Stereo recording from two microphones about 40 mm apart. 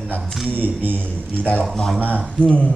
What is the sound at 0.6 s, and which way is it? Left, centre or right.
Speech, right.